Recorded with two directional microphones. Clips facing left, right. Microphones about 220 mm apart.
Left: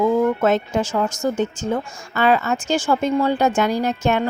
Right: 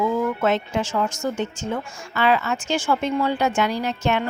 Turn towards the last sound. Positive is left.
turn(degrees=45)  # may be behind; listen again after turning